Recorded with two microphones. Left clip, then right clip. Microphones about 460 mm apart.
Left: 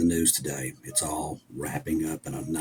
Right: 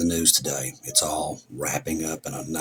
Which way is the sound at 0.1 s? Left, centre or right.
Left.